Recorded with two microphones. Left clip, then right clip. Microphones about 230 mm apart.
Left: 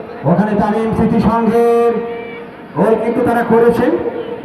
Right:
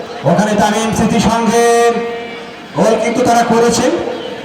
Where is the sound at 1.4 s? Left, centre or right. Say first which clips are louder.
Right 2 dB; right.